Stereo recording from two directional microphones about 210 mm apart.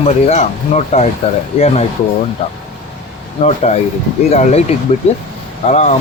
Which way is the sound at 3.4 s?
30° left (ahead or behind).